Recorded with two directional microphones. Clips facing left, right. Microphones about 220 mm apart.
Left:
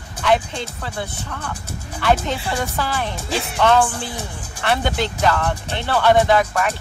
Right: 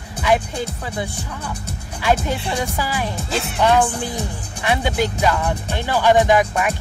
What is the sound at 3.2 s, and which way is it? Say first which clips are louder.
Speech: even; centre (ahead or behind).